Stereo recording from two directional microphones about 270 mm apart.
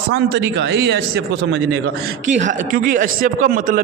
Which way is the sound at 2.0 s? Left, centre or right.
Right.